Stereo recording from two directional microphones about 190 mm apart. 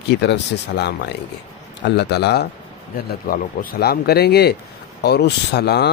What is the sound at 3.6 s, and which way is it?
Speech, 50° left (ahead or behind).